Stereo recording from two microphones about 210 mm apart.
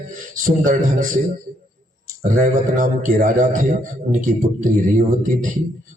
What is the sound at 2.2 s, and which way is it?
Mantra, 40° right (ahead or behind).